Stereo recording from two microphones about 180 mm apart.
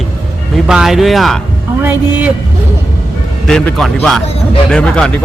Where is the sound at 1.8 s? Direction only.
10° right (ahead or behind).